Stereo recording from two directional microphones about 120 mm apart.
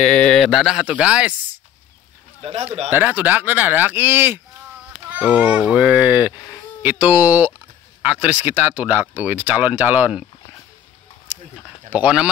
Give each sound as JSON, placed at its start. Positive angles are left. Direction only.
{"t": 0.0, "sound": "speech", "side_deg": 5}
{"t": 2.4, "sound": "speech", "side_deg": -60}
{"t": 2.9, "sound": "speech", "side_deg": -15}
{"t": 11.9, "sound": "speech", "side_deg": -10}